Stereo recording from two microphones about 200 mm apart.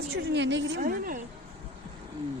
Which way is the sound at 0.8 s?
45° right (ahead or behind).